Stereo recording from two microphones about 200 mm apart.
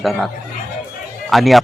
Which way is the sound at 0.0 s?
Centre (ahead or behind).